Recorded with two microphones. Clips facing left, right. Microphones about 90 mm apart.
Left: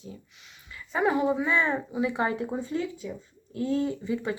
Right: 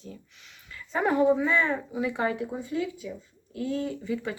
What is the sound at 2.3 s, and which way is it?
Speech, 30° left (ahead or behind).